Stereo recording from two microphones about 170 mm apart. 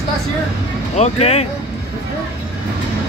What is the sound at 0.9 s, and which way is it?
Speech, 40° left (ahead or behind).